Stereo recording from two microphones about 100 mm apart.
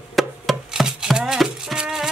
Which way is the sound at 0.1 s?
Centre (ahead or behind).